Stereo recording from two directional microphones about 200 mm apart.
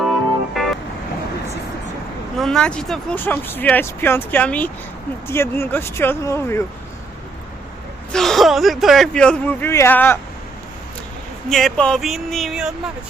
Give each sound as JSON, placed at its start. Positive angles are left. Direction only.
{"t": 0.6, "sound": "vehicle", "side_deg": 0}
{"t": 2.4, "sound": "speech", "side_deg": 5}
{"t": 8.1, "sound": "speech", "side_deg": 0}
{"t": 11.4, "sound": "speech", "side_deg": 0}